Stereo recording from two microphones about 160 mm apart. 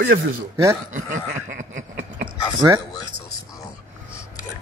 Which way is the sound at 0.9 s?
55° right (ahead or behind).